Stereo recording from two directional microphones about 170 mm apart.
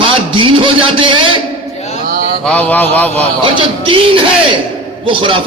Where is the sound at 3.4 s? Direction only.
30° right (ahead or behind).